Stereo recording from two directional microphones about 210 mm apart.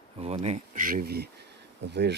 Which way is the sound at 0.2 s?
30° right (ahead or behind).